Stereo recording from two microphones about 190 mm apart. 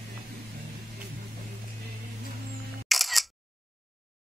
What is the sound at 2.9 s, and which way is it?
Single-lens reflex camera, centre (ahead or behind).